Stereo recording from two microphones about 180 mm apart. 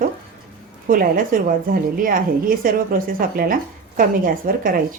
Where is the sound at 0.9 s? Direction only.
50° right (ahead or behind).